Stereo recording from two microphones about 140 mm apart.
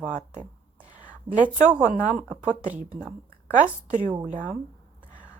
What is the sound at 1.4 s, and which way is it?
Speech, 70° right (ahead or behind).